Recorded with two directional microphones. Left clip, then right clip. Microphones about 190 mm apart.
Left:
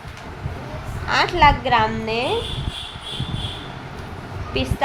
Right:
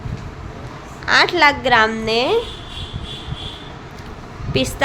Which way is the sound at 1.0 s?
20° right (ahead or behind).